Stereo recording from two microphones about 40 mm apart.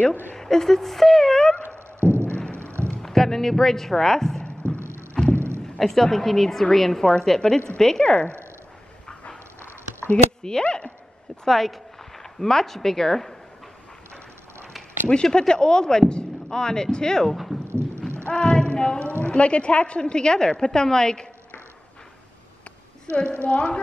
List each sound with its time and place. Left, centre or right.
0.4 s speech: centre
2.0 s music: right
2.3 s a sound: left
3.0 s a woman's voice: centre
4.5 s music: right
5.8 s a woman's voice: centre
10.1 s a sound: centre
10.6 s speech: left
11.4 s a woman's voice: centre
15.3 s speech: centre
17.6 s clip-clop: right
18.3 s speech: left
23.1 s speech: left